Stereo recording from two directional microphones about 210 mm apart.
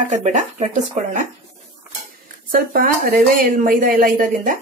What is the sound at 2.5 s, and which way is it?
Speech, 40° right (ahead or behind).